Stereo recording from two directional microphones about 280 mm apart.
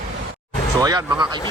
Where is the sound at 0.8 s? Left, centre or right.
Centre.